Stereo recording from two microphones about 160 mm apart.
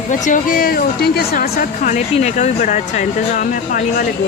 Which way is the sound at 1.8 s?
45° left (ahead or behind).